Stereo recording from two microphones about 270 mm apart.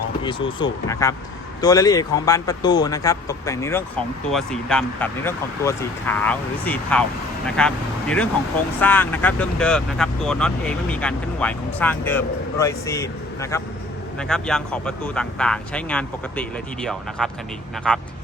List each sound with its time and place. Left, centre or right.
0.3 s speech: centre